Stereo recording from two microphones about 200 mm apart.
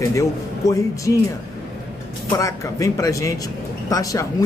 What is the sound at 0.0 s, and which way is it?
Speech, 15° left (ahead or behind).